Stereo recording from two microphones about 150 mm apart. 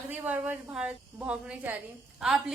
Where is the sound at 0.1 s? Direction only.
10° right (ahead or behind).